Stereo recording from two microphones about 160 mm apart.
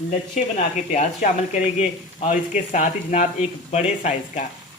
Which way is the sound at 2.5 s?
50° left (ahead or behind).